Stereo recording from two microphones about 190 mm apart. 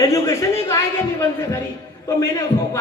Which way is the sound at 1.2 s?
15° left (ahead or behind).